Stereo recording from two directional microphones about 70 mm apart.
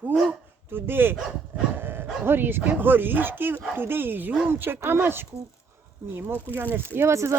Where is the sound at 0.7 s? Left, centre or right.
Right.